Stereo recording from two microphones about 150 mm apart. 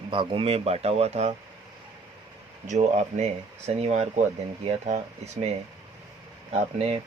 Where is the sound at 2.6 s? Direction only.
50° right (ahead or behind).